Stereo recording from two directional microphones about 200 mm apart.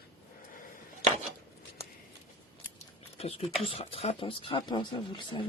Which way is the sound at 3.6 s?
30° left (ahead or behind).